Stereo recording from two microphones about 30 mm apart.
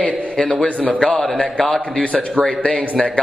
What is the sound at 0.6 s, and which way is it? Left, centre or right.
A man's voice, left.